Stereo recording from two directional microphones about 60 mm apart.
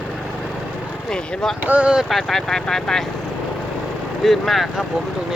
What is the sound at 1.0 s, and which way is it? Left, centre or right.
Speech, centre.